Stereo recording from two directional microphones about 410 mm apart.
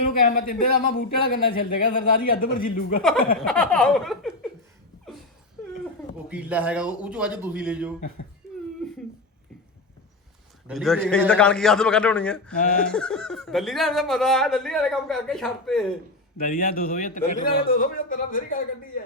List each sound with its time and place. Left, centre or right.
0.0 s speech: left
3.4 s speech: centre
6.2 s speech: centre
8.8 s a sound: centre
10.7 s speech: centre
12.5 s speech: centre
12.8 s speech: centre
16.4 s speech: left